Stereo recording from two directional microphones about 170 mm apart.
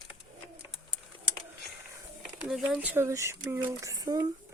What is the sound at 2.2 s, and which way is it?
Speech, centre (ahead or behind).